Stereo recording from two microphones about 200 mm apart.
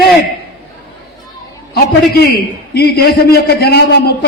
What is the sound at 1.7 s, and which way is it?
A man's voice, 50° left (ahead or behind).